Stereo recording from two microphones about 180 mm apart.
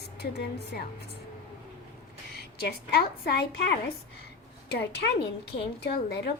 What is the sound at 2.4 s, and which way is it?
A woman's voice, 60° left (ahead or behind).